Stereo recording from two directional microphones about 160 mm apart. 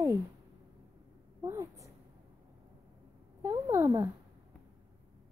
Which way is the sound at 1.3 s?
20° right (ahead or behind).